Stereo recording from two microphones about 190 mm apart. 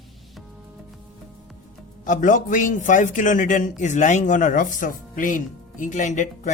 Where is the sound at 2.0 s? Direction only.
45° left (ahead or behind).